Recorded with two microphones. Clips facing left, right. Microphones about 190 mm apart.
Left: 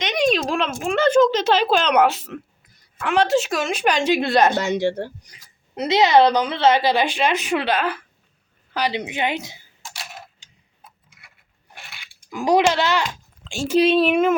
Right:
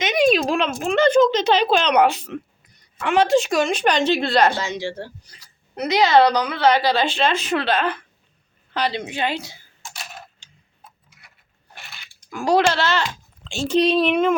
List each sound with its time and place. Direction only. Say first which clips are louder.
0.0 s a woman's voice: right 3 dB; 5° right (ahead or behind); by 4.6 s 20° left (ahead or behind)
4.6 s speech: left 6 dB; 60° left (ahead or behind)
5.7 s a woman's voice: left 1 dB; 25° left (ahead or behind)
12.3 s a woman's voice: left 1 dB; 15° left (ahead or behind)